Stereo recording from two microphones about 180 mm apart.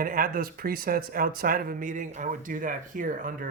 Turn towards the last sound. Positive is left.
turn(degrees=-50)  # may be behind; listen again after turning